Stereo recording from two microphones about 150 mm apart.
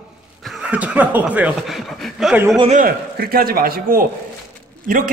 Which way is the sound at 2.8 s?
75° right (ahead or behind).